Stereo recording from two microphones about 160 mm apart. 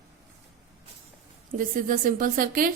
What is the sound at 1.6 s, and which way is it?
A woman's voice, 60° right (ahead or behind).